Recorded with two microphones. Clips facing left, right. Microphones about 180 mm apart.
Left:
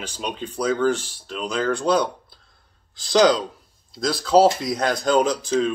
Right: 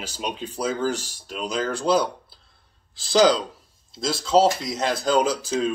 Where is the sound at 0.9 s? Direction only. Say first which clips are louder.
Left 5 dB; 40° right (ahead or behind).